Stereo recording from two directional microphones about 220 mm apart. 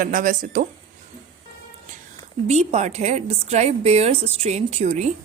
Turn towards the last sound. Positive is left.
turn(degrees=-30)  # may be behind; listen again after turning